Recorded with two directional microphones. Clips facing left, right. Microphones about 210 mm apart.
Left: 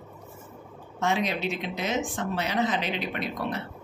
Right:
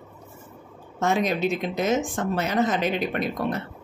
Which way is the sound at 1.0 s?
45° right (ahead or behind).